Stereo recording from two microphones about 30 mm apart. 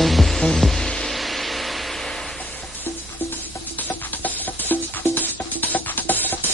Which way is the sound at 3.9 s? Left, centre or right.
Left.